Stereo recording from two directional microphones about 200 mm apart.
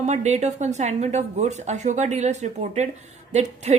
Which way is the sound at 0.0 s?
35° right (ahead or behind).